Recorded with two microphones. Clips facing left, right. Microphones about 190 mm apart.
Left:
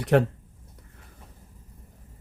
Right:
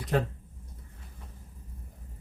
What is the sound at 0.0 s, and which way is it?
Speech, 75° left (ahead or behind).